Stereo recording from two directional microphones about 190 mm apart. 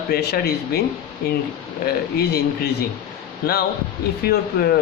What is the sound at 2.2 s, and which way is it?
Speech, 60° left (ahead or behind).